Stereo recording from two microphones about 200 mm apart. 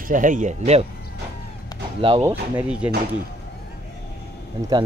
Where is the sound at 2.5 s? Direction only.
5° right (ahead or behind).